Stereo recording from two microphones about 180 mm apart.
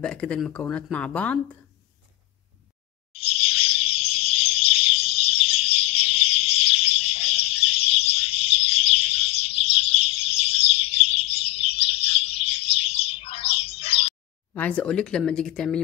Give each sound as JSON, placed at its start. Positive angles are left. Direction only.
{"t": 0.0, "sound": "speech", "side_deg": 5}
{"t": 3.1, "sound": "chirp", "side_deg": 30}
{"t": 14.5, "sound": "speech", "side_deg": 10}